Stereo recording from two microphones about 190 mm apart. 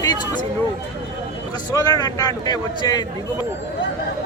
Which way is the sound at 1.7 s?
20° left (ahead or behind).